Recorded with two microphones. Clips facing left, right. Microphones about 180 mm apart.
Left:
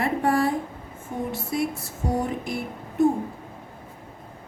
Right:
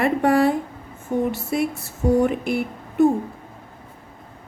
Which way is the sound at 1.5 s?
65° right (ahead or behind).